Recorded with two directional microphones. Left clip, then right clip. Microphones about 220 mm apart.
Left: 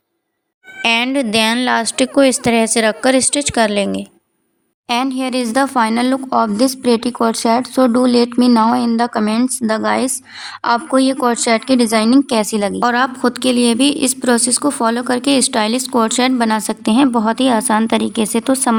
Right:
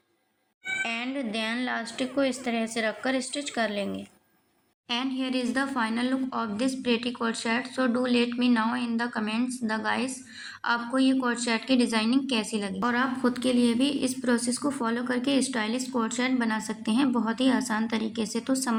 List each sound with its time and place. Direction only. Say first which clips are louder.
0.8 s a woman's voice: left 18 dB; 45° left (ahead or behind)